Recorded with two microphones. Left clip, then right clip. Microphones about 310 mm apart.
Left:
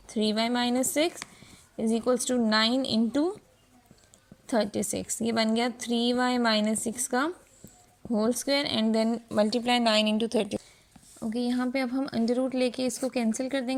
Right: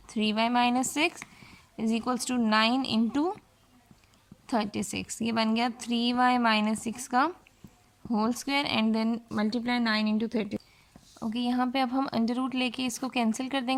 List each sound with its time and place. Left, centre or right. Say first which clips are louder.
0.1 s a woman's voice: even; centre
2.7 s a woman's voice: left 1 dB; right
3.1 s speech: left 1 dB; centre
4.4 s a woman's voice: left 3 dB; centre
11.3 s speech: even; centre